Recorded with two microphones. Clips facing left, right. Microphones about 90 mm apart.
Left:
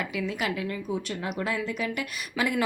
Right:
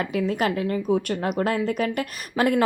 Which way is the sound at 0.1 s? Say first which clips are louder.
Right 6 dB; 40° right (ahead or behind).